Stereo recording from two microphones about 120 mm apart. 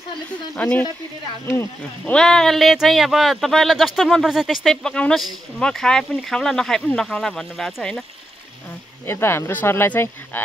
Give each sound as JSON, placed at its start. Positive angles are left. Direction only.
{"t": 0.6, "sound": "speech", "side_deg": 10}
{"t": 1.4, "sound": "speech", "side_deg": 20}
{"t": 2.0, "sound": "speech", "side_deg": 5}
{"t": 9.0, "sound": "speech", "side_deg": 20}